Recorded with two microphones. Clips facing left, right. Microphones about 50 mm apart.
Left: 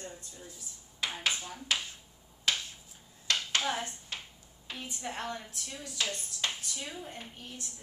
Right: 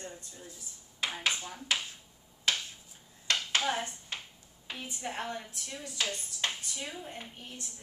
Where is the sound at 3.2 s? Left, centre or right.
Right.